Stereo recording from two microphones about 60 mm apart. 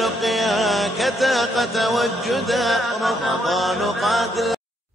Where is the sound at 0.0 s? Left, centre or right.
Centre.